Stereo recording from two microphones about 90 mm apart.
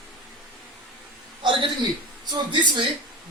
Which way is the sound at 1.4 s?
65° right (ahead or behind).